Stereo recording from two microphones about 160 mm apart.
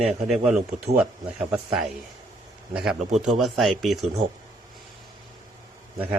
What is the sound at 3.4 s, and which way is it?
Speech, centre (ahead or behind).